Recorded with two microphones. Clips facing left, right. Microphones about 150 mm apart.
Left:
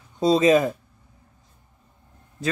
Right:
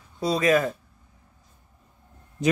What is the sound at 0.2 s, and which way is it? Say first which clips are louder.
Speech: left 4 dB; 25° left (ahead or behind).